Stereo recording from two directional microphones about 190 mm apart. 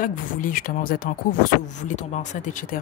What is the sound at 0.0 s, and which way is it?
Speech, 45° left (ahead or behind).